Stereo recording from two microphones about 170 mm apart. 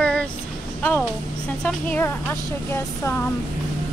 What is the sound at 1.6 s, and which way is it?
Speech, 5° left (ahead or behind).